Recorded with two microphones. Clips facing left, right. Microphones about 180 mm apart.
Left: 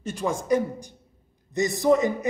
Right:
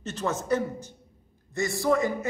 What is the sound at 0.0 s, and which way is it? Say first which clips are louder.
A man's voice: left 2 dB; 10° left (ahead or behind).